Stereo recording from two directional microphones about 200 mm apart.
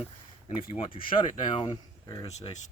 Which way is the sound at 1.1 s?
25° left (ahead or behind).